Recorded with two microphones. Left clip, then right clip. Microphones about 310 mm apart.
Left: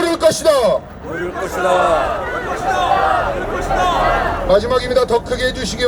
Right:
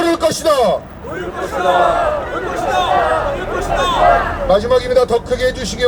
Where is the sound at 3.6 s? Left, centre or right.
Right.